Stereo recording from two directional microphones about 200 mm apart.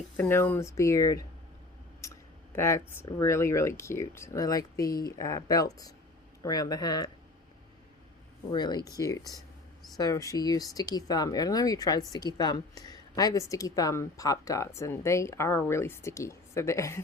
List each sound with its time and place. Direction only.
0.2 s speech: 10° left (ahead or behind)
8.4 s speech: 20° left (ahead or behind)